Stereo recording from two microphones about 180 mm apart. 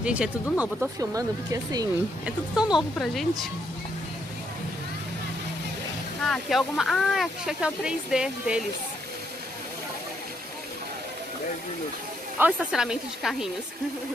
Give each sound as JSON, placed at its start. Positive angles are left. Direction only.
{"t": 0.0, "sound": "speech", "side_deg": -5}
{"t": 0.9, "sound": "speech", "side_deg": -20}
{"t": 2.2, "sound": "speech", "side_deg": -5}
{"t": 6.2, "sound": "speech", "side_deg": 0}
{"t": 12.4, "sound": "speech", "side_deg": -5}